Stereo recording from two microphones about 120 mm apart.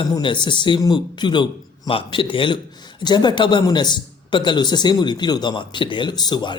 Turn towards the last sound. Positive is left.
turn(degrees=40)  # may be behind; listen again after turning